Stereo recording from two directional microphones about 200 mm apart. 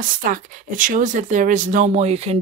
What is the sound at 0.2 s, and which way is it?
Speech, 40° right (ahead or behind).